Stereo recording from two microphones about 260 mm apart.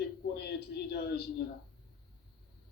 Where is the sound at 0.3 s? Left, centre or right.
Left.